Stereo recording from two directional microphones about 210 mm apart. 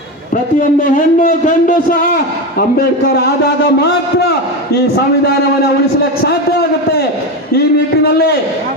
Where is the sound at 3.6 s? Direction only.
50° left (ahead or behind).